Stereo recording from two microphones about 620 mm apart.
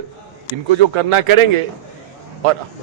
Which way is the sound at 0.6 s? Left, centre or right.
Right.